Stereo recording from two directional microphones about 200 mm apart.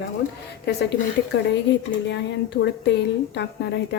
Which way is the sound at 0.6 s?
55° left (ahead or behind).